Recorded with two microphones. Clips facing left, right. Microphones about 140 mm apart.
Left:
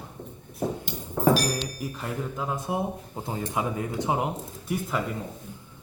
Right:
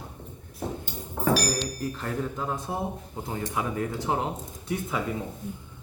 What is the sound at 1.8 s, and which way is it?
Speech, 10° left (ahead or behind).